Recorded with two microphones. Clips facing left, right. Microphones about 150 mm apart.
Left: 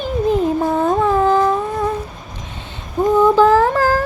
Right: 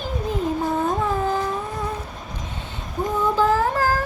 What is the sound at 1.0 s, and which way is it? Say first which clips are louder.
Humming: left 8 dB; 85° left.